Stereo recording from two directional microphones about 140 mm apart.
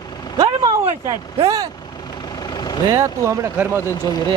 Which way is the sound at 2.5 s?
30° left (ahead or behind).